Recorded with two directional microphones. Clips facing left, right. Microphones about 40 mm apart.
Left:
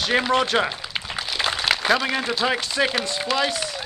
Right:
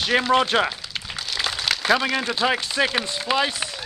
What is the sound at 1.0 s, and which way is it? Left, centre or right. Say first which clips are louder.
Crumpling: left 3 dB; centre.